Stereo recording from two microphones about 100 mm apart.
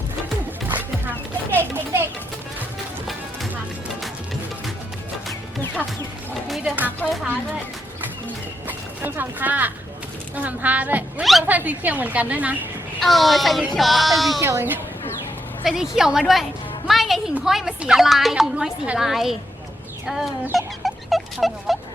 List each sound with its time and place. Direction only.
1.5 s children playing: 20° right (ahead or behind)
7.0 s speech: 15° left (ahead or behind)
8.6 s music: 20° right (ahead or behind)
10.3 s a woman's voice: 15° right (ahead or behind)
11.2 s a woman's voice: centre (ahead or behind)
11.4 s a woman's voice: 15° right (ahead or behind)
13.0 s a woman's voice: centre (ahead or behind)
14.4 s speech: 25° right (ahead or behind)
15.6 s a woman's voice: 5° right (ahead or behind)
20.1 s a sound: centre (ahead or behind)